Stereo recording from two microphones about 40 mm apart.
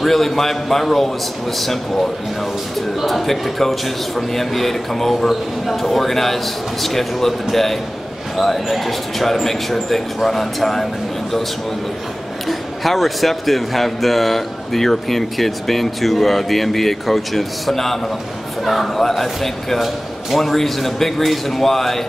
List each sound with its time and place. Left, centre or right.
0.0 s a man's voice: centre
3.0 s a man's voice: centre
12.4 s a man's voice: centre